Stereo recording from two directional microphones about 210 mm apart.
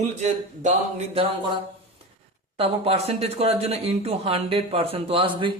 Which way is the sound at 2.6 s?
30° right (ahead or behind).